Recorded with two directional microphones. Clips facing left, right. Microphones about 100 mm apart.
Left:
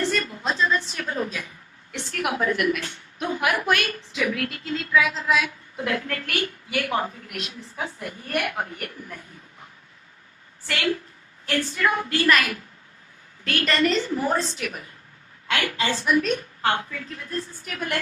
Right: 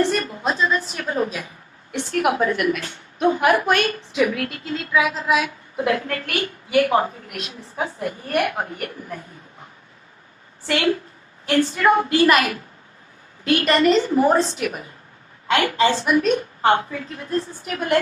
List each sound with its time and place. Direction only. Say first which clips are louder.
0.0 s a sound: right 5 dB; 20° right (ahead or behind)
1.0 s a woman's voice: right 5 dB; 30° right (ahead or behind)
10.7 s a woman's voice: right 5 dB; 30° right (ahead or behind)
13.7 s a woman's voice: right 5 dB; 35° right (ahead or behind)